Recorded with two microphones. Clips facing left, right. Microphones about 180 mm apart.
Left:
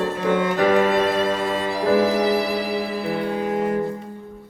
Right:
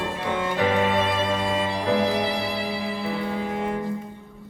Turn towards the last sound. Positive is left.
turn(degrees=45)  # may be behind; listen again after turning